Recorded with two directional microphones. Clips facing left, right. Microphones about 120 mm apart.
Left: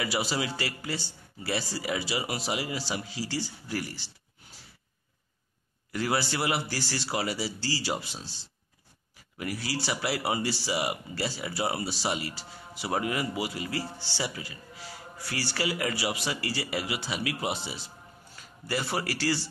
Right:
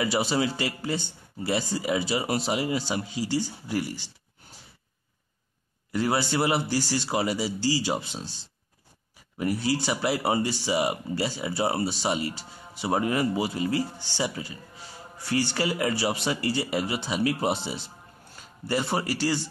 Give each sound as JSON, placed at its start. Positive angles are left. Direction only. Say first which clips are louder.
{"t": 0.0, "sound": "speech", "louder": "right 5 dB", "side_deg": -25}
{"t": 5.9, "sound": "speech", "louder": "right 3 dB", "side_deg": -20}
{"t": 9.4, "sound": "speech", "louder": "right 7 dB", "side_deg": -25}